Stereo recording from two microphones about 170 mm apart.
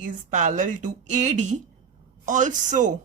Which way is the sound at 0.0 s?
45° right (ahead or behind).